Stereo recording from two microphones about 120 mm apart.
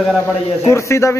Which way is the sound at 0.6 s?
25° left (ahead or behind).